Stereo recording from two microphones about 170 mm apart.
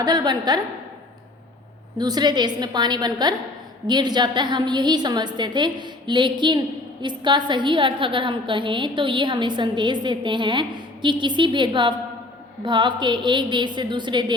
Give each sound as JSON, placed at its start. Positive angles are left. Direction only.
{"t": 0.0, "sound": "a woman's voice", "side_deg": -25}
{"t": 2.0, "sound": "a woman's voice", "side_deg": -25}